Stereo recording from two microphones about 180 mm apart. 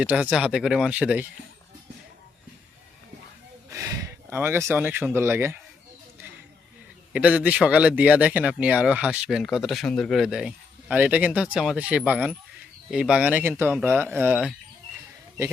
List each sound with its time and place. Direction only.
0.0 s speech: 5° right (ahead or behind)
3.7 s a sound: 20° right (ahead or behind)
4.4 s speech: 10° right (ahead or behind)
7.1 s speech: 5° right (ahead or behind)